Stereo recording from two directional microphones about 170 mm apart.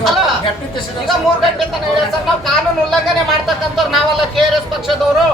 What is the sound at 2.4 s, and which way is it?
Speech, centre (ahead or behind).